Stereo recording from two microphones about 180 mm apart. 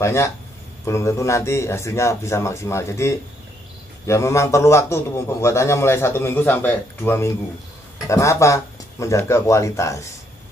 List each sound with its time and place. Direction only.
0.0 s a man's voice: 15° left (ahead or behind)